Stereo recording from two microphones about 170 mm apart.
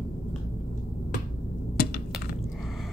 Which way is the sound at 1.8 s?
65° left (ahead or behind).